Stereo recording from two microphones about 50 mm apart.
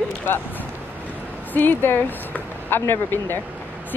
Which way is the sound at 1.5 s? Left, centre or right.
Left.